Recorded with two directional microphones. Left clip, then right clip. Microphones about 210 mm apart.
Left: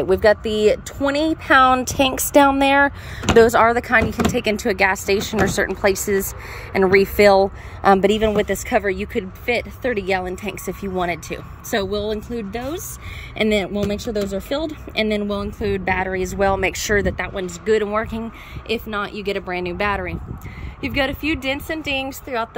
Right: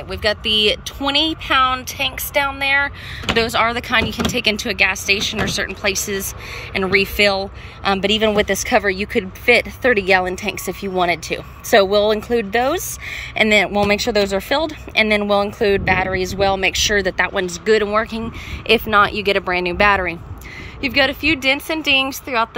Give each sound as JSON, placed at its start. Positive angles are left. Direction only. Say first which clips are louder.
{"t": 0.1, "sound": "speech", "louder": "left 1 dB", "side_deg": 25}
{"t": 1.6, "sound": "speech", "louder": "left 2 dB", "side_deg": 40}
{"t": 8.2, "sound": "speech", "louder": "right 3 dB", "side_deg": 10}